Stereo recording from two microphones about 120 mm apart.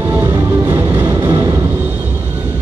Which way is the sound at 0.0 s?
20° right (ahead or behind).